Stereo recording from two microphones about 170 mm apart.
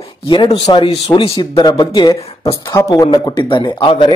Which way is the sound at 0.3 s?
25° left (ahead or behind).